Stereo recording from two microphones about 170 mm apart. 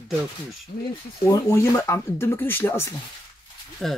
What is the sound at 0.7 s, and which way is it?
Speech, 50° left (ahead or behind).